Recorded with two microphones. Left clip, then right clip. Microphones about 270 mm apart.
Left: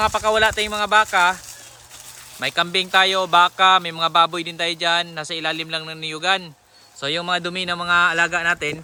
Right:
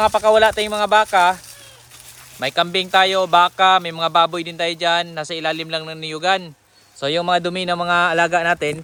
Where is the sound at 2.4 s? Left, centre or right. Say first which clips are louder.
Right 2 dB; centre.